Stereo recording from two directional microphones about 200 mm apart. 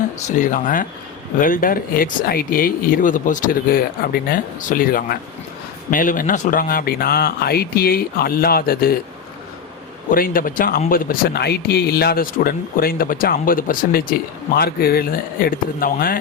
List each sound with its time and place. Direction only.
0.3 s speech: 40° left (ahead or behind)
10.1 s speech: 45° left (ahead or behind)